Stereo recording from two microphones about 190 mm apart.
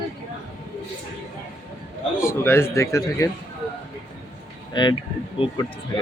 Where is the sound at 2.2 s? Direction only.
15° left (ahead or behind).